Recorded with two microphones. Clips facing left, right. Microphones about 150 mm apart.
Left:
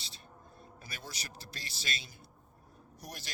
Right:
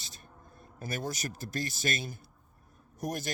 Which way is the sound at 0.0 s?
45° right (ahead or behind).